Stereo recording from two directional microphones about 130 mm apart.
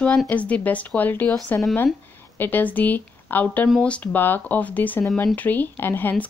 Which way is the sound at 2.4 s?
15° left (ahead or behind).